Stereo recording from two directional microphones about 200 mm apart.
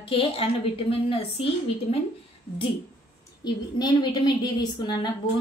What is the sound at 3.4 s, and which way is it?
A woman's voice, 20° left (ahead or behind).